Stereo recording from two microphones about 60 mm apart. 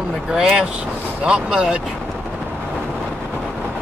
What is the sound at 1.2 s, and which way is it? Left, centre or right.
Speech, centre.